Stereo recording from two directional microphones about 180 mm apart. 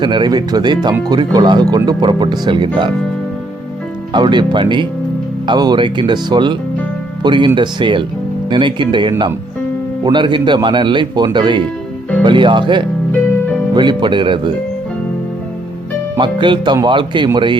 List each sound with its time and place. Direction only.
0.0 s speech: 25° right (ahead or behind)
4.1 s speech: 25° right (ahead or behind)
16.1 s speech: 25° right (ahead or behind)